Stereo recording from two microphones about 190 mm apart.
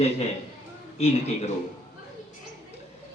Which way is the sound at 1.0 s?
35° left (ahead or behind).